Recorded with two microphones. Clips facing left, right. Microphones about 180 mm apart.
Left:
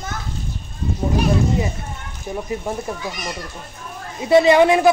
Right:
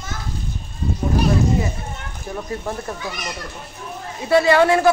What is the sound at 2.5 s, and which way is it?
Speech, 15° left (ahead or behind).